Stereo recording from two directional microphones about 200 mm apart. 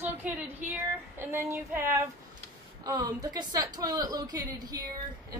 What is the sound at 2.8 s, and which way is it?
A woman's voice, 20° right (ahead or behind).